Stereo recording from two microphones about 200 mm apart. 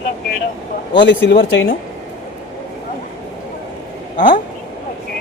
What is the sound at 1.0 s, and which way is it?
Speech, 65° left (ahead or behind).